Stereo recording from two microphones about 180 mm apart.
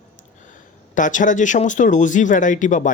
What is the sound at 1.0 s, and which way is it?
Speech, 45° left (ahead or behind).